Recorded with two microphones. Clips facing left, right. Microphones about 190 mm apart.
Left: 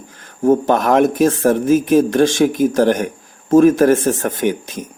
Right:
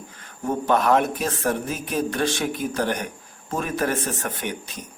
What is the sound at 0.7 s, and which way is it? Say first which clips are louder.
Speech: left 6 dB; 45° left (ahead or behind).